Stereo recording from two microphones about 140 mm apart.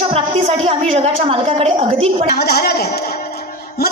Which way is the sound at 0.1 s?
50° right (ahead or behind).